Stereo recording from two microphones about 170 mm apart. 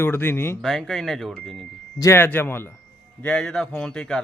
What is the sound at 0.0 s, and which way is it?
Speech, 15° left (ahead or behind).